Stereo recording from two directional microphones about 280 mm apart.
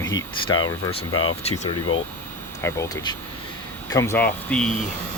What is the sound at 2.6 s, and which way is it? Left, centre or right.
Speech, centre.